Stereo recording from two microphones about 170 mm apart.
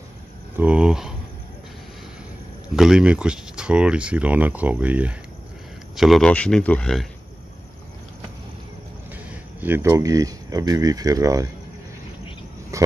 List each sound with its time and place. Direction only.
0.6 s speech: 5° right (ahead or behind)
2.7 s speech: 5° right (ahead or behind)
9.1 s speech: 10° right (ahead or behind)
12.7 s a sound: 20° right (ahead or behind)